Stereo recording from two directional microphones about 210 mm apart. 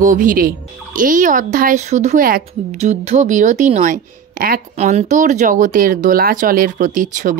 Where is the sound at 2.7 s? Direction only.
30° right (ahead or behind).